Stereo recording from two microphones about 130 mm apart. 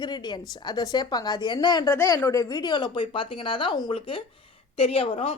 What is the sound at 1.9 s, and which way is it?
A woman's voice, 20° left (ahead or behind).